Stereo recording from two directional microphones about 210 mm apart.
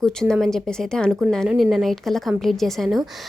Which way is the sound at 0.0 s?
5° left (ahead or behind).